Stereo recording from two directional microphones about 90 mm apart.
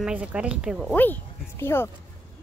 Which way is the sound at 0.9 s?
20° left (ahead or behind).